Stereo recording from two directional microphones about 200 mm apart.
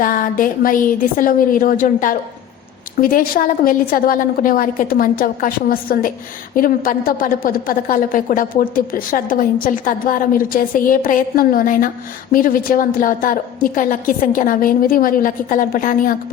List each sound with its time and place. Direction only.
0.0 s a woman's voice: 45° left (ahead or behind)